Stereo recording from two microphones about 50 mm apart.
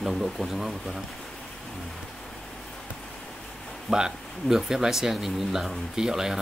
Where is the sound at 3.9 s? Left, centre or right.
Centre.